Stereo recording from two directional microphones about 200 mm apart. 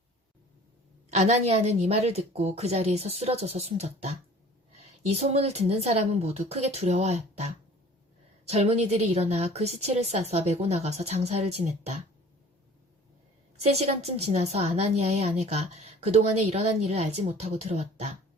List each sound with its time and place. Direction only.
1.1 s a woman's voice: 35° right (ahead or behind)
13.6 s a woman's voice: 30° right (ahead or behind)